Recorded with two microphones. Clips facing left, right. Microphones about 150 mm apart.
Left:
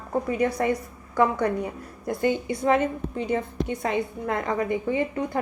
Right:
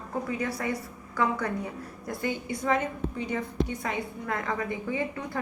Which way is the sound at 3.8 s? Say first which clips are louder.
Left 6 dB; 25° left (ahead or behind).